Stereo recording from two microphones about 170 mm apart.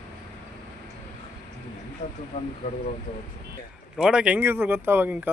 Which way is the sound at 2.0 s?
45° left (ahead or behind).